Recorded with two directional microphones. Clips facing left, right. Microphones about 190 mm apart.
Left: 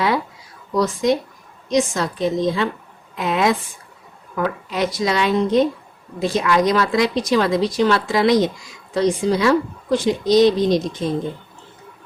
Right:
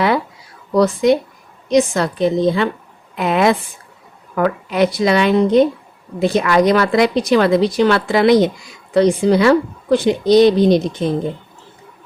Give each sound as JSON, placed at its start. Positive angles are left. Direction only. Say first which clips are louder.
{"t": 0.7, "sound": "a woman's voice", "louder": "right 5 dB", "side_deg": -60}